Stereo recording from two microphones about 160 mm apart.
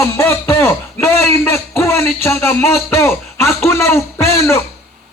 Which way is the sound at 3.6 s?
15° left (ahead or behind).